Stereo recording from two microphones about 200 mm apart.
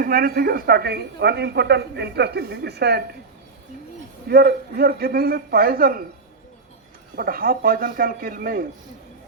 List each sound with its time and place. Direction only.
0.0 s a woman's voice: 45° right (ahead or behind)
4.3 s a woman's voice: 50° right (ahead or behind)
7.2 s a woman's voice: 45° right (ahead or behind)